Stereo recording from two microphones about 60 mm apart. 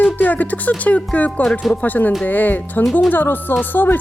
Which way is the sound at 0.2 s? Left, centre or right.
Left.